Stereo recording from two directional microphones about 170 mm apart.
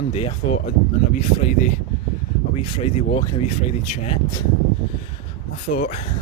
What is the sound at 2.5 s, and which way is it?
Speech, 35° left (ahead or behind).